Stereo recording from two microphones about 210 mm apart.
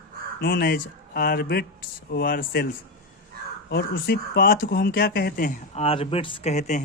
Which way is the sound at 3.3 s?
45° right (ahead or behind).